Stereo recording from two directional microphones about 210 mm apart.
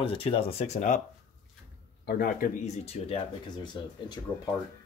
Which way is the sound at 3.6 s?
20° left (ahead or behind).